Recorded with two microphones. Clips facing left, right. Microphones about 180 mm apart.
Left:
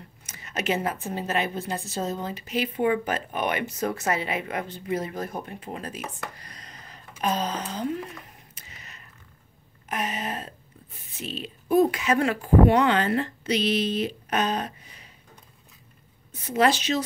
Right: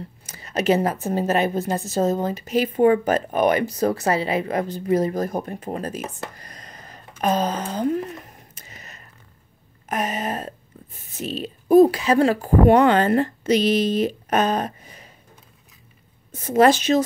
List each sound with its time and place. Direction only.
0.3 s a woman's voice: 35° right (ahead or behind)
6.3 s a sound: 45° right (ahead or behind)
9.8 s a woman's voice: 45° right (ahead or behind)
12.6 s speech: 45° right (ahead or behind)
16.3 s a woman's voice: 45° right (ahead or behind)